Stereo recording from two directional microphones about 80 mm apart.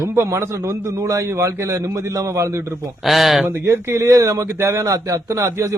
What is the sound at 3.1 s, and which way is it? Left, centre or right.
Speech, centre.